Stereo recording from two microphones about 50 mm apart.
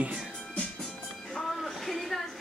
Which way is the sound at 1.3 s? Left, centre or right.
Centre.